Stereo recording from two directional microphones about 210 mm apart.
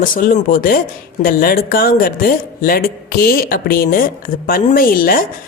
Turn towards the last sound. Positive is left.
turn(degrees=40)  # may be behind; listen again after turning